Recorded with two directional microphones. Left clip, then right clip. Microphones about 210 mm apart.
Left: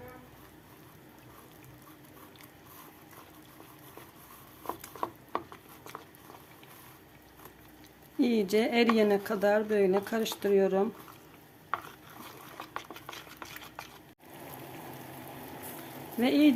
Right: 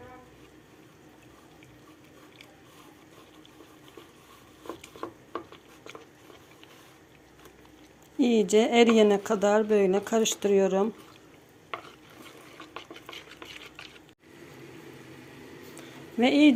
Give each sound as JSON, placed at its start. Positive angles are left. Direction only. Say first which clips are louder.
{"t": 4.6, "sound": "ratchet", "louder": "left 3 dB", "side_deg": 55}
{"t": 8.2, "sound": "speech", "louder": "right 5 dB", "side_deg": -5}
{"t": 16.2, "sound": "speech", "louder": "right 4 dB", "side_deg": -5}